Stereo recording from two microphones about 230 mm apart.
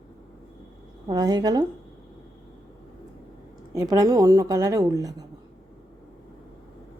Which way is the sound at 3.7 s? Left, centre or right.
Centre.